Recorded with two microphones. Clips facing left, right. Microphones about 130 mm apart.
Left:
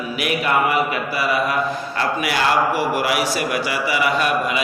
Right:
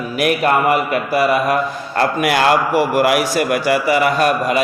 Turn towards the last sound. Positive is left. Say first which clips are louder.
# right 4 dB
turn(degrees=-45)  # may be behind; listen again after turning